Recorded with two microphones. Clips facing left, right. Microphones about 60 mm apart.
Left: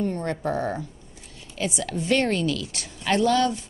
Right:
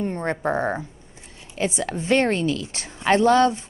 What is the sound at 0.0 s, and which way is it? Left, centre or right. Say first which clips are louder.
A woman's voice: right 2 dB; right.